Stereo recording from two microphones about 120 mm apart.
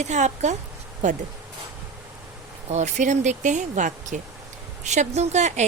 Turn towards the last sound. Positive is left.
turn(degrees=-75)  # may be behind; listen again after turning